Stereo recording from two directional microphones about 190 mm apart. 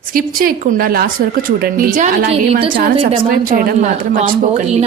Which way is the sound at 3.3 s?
45° right (ahead or behind).